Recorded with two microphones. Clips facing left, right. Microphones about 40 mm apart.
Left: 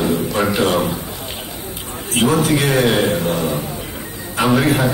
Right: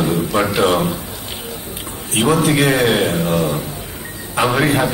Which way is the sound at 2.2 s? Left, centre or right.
Centre.